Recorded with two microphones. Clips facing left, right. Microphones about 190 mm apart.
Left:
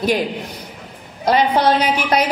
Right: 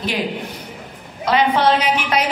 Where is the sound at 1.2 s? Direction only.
40° left (ahead or behind).